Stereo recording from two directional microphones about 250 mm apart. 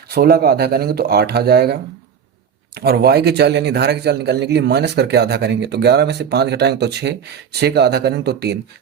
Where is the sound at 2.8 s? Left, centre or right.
Right.